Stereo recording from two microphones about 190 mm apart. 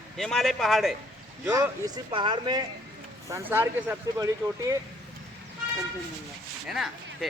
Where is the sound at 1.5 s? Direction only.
20° right (ahead or behind).